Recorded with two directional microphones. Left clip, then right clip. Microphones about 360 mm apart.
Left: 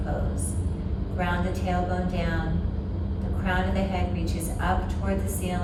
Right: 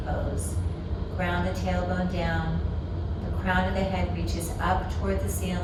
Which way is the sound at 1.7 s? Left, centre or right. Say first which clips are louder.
Left 4 dB; centre.